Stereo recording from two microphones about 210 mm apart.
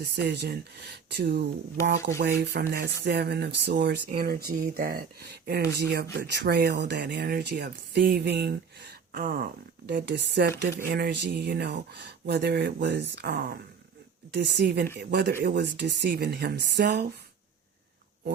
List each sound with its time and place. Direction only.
0.0 s speech: 50° right (ahead or behind)